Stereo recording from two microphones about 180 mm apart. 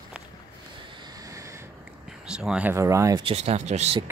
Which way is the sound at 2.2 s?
5° right (ahead or behind).